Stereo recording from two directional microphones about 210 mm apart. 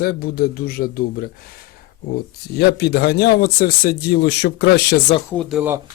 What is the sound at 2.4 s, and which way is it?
A man's voice, 50° left (ahead or behind).